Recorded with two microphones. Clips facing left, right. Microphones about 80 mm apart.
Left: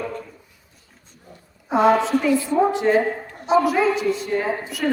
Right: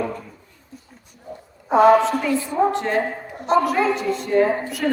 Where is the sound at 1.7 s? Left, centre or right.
Centre.